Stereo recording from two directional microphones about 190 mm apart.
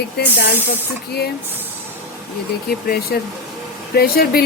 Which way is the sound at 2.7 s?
55° left (ahead or behind).